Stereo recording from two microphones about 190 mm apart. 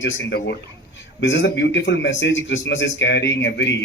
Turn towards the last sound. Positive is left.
turn(degrees=70)  # may be behind; listen again after turning